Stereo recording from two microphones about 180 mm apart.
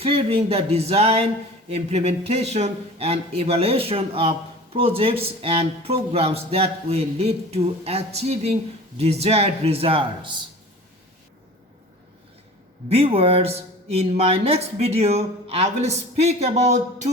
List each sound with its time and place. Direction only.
0.0 s speech: 30° right (ahead or behind)
12.9 s speech: 35° right (ahead or behind)